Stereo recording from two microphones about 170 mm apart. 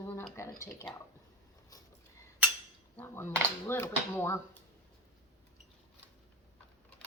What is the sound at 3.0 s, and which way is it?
Speech, 15° left (ahead or behind).